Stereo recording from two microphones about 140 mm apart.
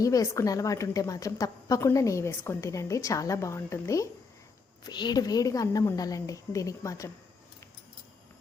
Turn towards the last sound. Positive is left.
turn(degrees=25)  # may be behind; listen again after turning